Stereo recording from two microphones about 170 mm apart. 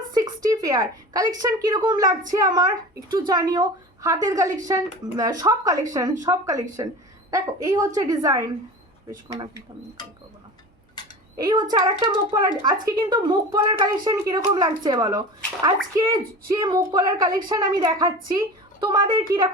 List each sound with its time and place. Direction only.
0.1 s a woman's voice: 20° right (ahead or behind)
11.3 s speech: 25° right (ahead or behind)